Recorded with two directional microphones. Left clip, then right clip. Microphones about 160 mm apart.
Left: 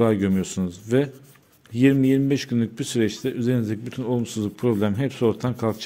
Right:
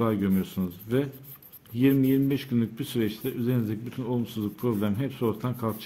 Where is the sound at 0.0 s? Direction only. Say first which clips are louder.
Left 6 dB; 35° left (ahead or behind).